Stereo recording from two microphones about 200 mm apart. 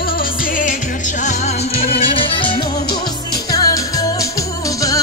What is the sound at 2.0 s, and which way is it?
Music, 25° left (ahead or behind).